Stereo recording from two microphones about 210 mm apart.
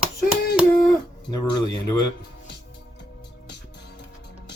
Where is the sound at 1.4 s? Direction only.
20° left (ahead or behind).